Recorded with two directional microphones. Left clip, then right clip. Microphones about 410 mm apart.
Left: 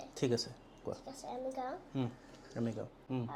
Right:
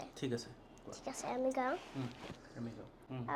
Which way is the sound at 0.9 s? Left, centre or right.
Right.